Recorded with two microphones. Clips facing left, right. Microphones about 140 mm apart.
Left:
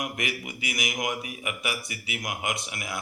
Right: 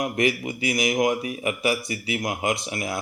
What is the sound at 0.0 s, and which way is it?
A man's voice, 35° right (ahead or behind).